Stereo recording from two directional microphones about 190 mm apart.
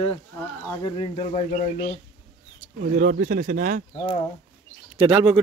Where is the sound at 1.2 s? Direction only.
35° left (ahead or behind).